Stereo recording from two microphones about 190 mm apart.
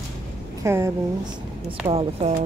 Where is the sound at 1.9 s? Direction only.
30° right (ahead or behind).